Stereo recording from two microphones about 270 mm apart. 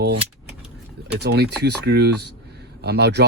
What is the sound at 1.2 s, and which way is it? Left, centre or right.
Speech, right.